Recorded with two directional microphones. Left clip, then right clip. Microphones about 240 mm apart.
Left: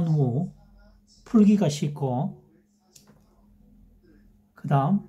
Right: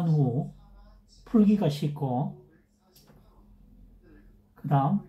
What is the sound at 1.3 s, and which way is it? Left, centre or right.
Speech, left.